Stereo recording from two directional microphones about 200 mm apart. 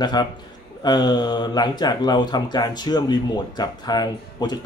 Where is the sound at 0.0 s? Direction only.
20° left (ahead or behind).